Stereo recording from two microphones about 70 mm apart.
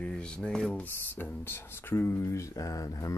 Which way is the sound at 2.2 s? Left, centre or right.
Left.